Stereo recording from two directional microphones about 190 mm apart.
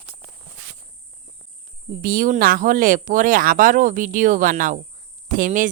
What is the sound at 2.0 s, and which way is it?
Speech, 45° right (ahead or behind).